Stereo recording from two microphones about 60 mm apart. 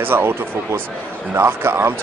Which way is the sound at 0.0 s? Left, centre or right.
Right.